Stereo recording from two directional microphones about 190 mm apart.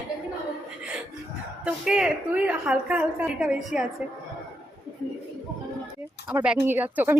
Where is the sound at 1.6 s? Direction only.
5° right (ahead or behind).